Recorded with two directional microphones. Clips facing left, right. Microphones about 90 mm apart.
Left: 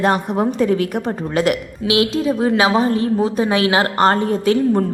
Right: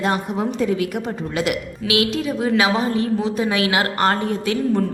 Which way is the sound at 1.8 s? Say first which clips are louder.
Left 4 dB; 25° left (ahead or behind).